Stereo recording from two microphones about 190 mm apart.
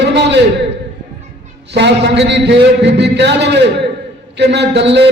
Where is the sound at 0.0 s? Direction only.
65° right (ahead or behind).